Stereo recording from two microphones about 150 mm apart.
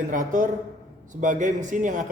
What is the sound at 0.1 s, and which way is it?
A man's voice, 60° right (ahead or behind).